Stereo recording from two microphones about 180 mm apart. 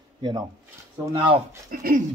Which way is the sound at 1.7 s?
55° right (ahead or behind).